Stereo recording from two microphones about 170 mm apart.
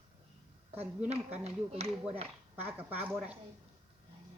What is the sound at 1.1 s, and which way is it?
Speech, 40° right (ahead or behind).